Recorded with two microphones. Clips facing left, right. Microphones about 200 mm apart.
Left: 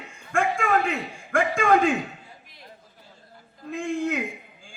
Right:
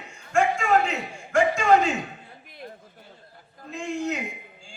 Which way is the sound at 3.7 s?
55° left (ahead or behind).